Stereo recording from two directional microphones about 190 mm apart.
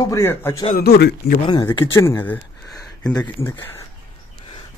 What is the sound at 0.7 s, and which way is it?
Speech, 55° left (ahead or behind).